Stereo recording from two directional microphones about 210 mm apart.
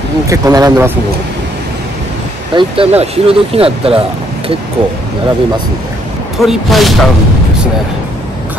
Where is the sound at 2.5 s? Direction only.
20° right (ahead or behind).